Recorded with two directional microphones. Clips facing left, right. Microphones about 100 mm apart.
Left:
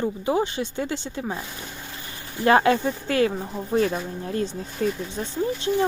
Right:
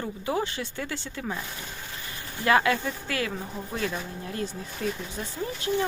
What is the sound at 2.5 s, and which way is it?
Speech, 30° left (ahead or behind).